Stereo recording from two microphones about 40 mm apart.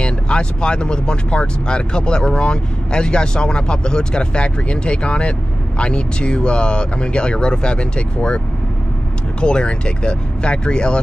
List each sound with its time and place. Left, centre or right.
0.0 s speech: left
9.4 s speech: left